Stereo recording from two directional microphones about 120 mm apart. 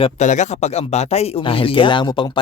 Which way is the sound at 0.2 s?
85° left.